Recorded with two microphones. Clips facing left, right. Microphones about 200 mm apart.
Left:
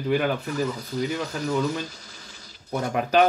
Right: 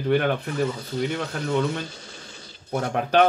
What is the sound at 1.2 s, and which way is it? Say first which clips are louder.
Speech: even; 60° right (ahead or behind).